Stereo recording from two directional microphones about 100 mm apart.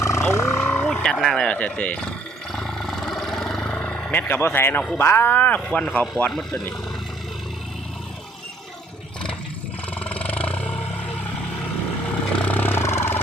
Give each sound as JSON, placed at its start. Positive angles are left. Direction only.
{"t": 0.0, "sound": "vehicle", "side_deg": 30}
{"t": 0.6, "sound": "vehicle", "side_deg": 10}
{"t": 1.5, "sound": "roar", "side_deg": 10}
{"t": 4.9, "sound": "speech", "side_deg": 20}
{"t": 10.0, "sound": "roar", "side_deg": 15}
{"t": 12.0, "sound": "vehicle", "side_deg": 15}